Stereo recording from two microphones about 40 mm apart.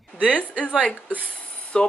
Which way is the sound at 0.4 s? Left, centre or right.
Left.